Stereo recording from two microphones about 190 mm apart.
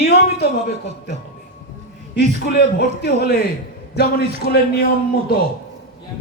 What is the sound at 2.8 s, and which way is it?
A man's voice, 60° left (ahead or behind).